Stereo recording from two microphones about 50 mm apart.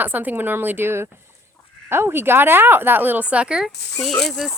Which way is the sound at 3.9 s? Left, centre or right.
Centre.